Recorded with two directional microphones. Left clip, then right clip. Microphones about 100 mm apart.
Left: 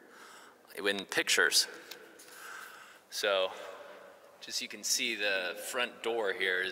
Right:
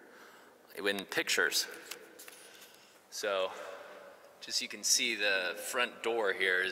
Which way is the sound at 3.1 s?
15° left (ahead or behind).